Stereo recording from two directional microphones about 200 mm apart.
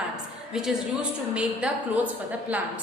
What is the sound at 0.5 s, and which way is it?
A woman's voice, 5° right (ahead or behind).